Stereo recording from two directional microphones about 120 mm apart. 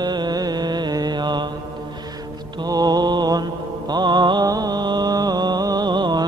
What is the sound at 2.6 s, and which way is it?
Mantra, 35° right (ahead or behind).